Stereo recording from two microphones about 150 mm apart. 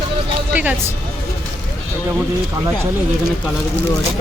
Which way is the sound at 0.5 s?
10° right (ahead or behind).